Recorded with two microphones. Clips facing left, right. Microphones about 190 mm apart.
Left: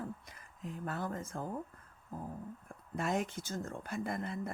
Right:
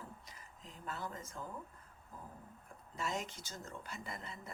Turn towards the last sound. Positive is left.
turn(degrees=55)  # may be behind; listen again after turning